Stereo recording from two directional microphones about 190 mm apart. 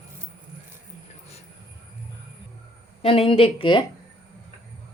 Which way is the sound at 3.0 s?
30° left (ahead or behind).